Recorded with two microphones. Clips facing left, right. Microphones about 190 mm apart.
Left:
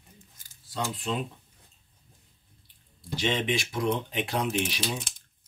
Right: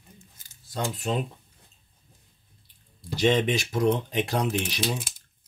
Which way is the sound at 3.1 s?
40° right (ahead or behind).